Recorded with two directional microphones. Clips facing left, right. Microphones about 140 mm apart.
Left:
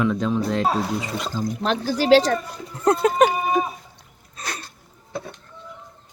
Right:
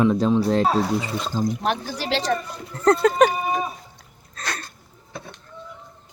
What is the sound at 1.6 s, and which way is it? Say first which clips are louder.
Speech: left 7 dB; 90° left.